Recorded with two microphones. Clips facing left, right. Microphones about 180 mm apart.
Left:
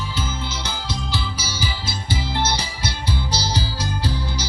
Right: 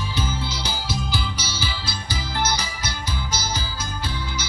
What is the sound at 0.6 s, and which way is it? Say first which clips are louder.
Music: right 1 dB; 5° right (ahead or behind).